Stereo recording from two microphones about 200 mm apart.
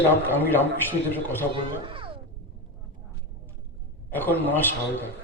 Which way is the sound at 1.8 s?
25° right (ahead or behind).